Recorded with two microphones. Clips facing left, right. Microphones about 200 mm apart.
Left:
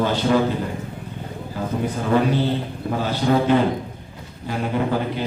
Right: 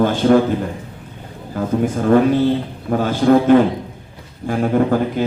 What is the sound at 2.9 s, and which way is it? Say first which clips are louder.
A man's voice: right 7 dB; 50° right (ahead or behind).